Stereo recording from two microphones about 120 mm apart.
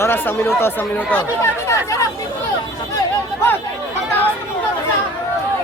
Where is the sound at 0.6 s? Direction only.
15° left (ahead or behind).